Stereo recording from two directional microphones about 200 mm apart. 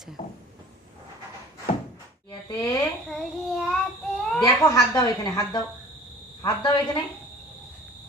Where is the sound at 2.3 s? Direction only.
20° left (ahead or behind).